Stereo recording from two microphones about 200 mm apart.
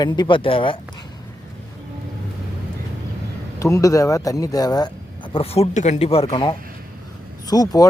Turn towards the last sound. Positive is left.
turn(degrees=20)  # may be behind; listen again after turning